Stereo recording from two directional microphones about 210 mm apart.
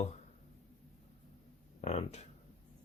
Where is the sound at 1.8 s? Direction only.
30° left (ahead or behind).